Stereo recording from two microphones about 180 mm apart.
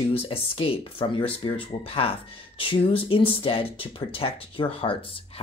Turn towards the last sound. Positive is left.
turn(degrees=30)  # may be behind; listen again after turning